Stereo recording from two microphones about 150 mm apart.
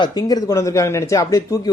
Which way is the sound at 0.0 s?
25° left (ahead or behind).